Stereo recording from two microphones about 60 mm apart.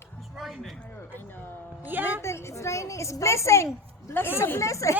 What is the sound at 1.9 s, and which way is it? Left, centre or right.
Music, right.